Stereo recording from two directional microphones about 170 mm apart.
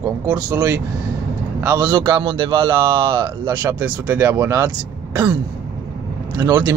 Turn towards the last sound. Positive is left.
turn(degrees=-20)  # may be behind; listen again after turning